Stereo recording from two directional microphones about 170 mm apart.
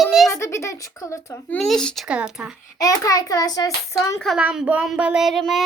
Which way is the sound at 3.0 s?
20° left (ahead or behind).